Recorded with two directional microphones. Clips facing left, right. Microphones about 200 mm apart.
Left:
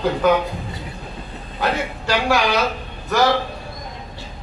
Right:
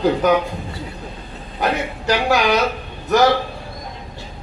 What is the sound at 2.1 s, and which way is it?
Speech, 20° right (ahead or behind).